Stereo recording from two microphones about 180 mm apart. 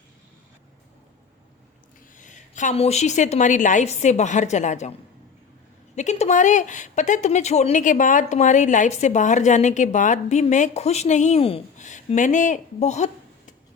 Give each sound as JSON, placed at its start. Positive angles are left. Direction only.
{"t": 2.1, "sound": "a woman's voice", "side_deg": 45}
{"t": 6.0, "sound": "speech", "side_deg": 40}